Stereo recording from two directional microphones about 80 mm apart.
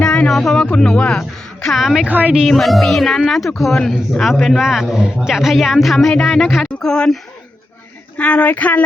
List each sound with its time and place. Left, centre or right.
0.0 s speech: centre
2.0 s a woman's voice: centre
2.5 s a man's voice: centre
8.2 s speech: centre